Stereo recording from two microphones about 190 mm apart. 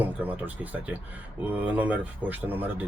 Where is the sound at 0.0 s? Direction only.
10° right (ahead or behind).